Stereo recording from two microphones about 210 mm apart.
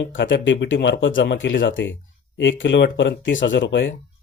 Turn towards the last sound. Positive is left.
turn(degrees=60)  # may be behind; listen again after turning